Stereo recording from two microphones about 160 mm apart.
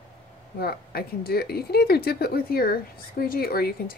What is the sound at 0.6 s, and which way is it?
Speech, 75° left (ahead or behind).